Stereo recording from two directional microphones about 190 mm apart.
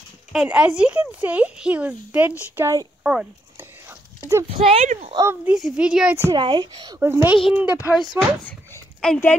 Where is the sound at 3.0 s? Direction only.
5° right (ahead or behind).